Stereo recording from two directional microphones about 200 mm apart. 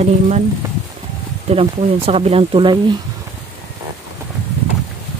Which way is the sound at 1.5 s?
30° right (ahead or behind).